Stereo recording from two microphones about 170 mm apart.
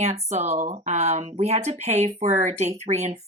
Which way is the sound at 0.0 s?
40° right (ahead or behind).